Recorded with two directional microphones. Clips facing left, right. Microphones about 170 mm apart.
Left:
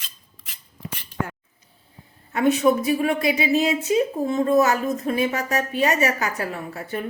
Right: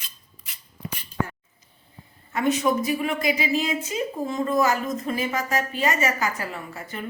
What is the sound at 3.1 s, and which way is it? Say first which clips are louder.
A woman's voice: left 3 dB; 65° left (ahead or behind).